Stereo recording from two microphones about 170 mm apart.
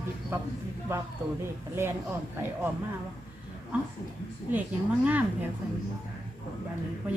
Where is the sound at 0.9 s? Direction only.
15° right (ahead or behind).